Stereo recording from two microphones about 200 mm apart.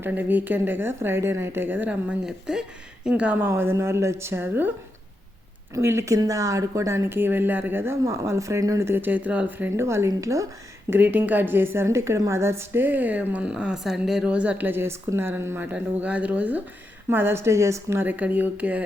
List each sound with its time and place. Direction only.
0.0 s speech: 10° right (ahead or behind)
5.7 s speech: 15° right (ahead or behind)